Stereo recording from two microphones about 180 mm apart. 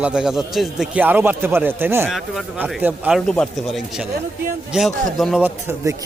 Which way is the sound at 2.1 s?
Centre (ahead or behind).